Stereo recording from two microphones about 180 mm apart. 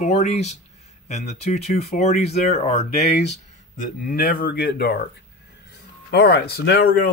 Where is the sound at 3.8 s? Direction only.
50° left (ahead or behind).